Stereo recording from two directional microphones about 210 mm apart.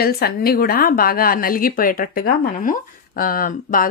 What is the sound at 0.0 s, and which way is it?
A woman's voice, 45° left (ahead or behind).